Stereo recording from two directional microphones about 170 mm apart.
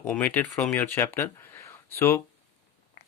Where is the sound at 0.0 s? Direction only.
5° left (ahead or behind).